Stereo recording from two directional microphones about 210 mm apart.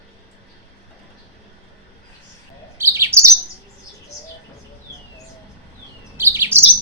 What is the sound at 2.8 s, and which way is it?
Chirp, 10° right (ahead or behind).